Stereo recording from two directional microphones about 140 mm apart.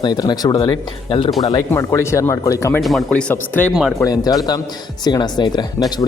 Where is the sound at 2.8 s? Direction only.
5° left (ahead or behind).